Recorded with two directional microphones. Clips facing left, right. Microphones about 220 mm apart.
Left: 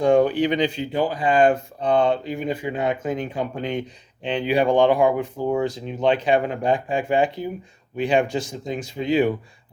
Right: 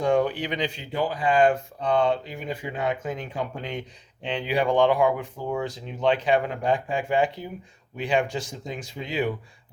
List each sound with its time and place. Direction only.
0.0 s speech: 25° left (ahead or behind)
6.0 s speech: 20° left (ahead or behind)